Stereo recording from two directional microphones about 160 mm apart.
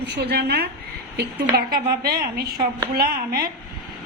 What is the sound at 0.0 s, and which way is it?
A woman's voice, 90° right.